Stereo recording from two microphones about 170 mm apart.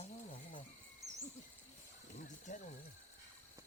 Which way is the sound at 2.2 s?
45° left (ahead or behind).